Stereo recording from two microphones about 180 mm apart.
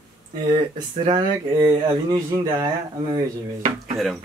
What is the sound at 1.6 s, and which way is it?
Speech, 20° right (ahead or behind).